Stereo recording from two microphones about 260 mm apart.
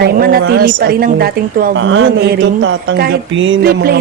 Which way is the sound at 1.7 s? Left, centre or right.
Right.